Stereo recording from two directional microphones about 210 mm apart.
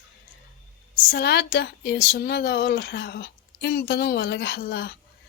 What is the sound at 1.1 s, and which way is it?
Speech, 50° left (ahead or behind).